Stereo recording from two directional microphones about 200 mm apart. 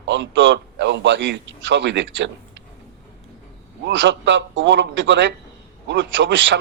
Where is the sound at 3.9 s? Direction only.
65° right (ahead or behind).